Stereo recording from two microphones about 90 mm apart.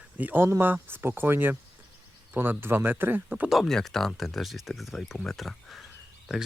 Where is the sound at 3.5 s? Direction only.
5° left (ahead or behind).